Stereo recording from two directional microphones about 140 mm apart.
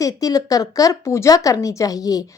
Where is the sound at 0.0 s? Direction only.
25° left (ahead or behind).